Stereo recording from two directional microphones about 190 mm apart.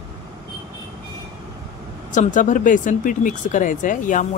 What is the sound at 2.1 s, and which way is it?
Speech, 40° left (ahead or behind).